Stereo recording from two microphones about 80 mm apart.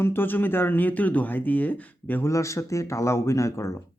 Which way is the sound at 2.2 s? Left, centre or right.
Left.